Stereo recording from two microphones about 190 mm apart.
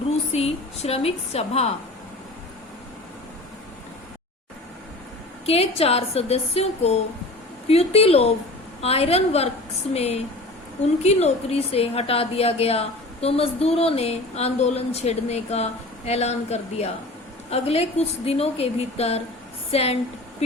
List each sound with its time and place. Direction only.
0.3 s speech: 35° left (ahead or behind)
5.5 s speech: 30° left (ahead or behind)